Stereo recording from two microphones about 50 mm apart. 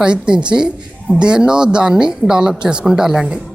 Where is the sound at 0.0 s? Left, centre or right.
Centre.